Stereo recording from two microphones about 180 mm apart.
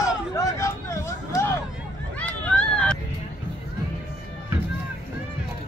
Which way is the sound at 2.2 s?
10° left (ahead or behind).